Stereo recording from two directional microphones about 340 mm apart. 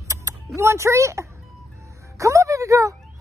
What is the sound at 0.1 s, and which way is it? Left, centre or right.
Speech, centre.